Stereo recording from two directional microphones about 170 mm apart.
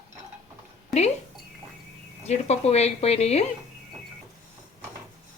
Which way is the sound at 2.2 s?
40° left (ahead or behind).